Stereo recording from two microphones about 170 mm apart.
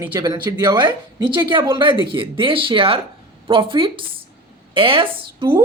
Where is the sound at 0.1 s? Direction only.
25° right (ahead or behind).